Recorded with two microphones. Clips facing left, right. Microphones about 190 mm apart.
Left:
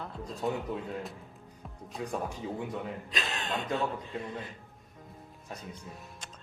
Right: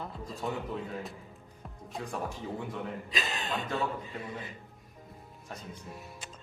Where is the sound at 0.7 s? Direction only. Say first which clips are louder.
Left 1 dB; 15° left (ahead or behind).